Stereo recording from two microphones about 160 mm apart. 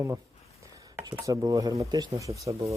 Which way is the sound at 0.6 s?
20° right (ahead or behind).